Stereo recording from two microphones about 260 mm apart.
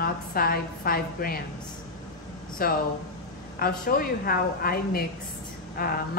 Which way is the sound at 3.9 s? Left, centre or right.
Left.